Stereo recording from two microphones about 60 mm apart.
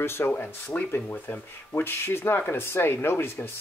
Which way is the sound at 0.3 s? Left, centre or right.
Left.